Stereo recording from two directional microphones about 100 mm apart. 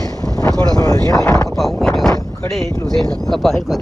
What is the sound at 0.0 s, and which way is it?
Wind noise, 35° left (ahead or behind).